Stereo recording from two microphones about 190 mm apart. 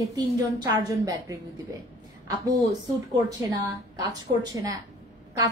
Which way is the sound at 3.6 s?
20° right (ahead or behind).